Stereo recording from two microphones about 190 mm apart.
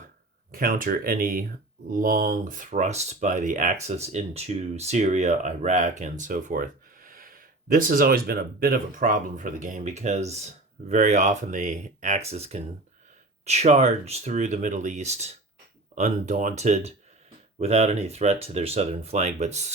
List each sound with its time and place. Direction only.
0.5 s speech: 50° right (ahead or behind)